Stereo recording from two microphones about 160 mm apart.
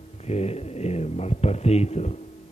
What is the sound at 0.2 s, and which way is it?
Speech, 40° left (ahead or behind).